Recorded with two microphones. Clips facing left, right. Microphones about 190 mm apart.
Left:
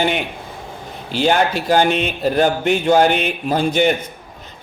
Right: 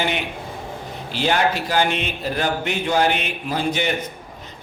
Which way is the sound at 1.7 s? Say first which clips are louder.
Left 5 dB; 50° left (ahead or behind).